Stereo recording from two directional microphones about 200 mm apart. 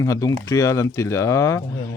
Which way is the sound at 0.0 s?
15° left (ahead or behind).